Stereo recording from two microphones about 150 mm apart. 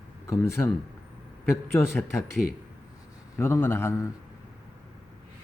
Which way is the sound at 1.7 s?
15° left (ahead or behind).